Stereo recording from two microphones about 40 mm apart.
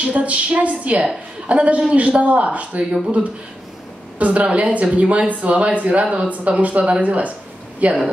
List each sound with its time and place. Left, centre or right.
0.0 s speech: right
4.2 s speech: right